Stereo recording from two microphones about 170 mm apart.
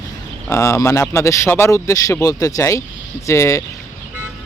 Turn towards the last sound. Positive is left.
turn(degrees=15)  # may be behind; listen again after turning